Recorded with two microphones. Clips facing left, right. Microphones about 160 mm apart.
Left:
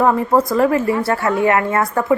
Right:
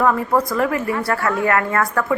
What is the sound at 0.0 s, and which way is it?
A woman's voice, 25° left (ahead or behind).